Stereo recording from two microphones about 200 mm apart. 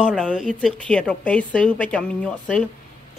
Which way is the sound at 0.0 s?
5° left (ahead or behind).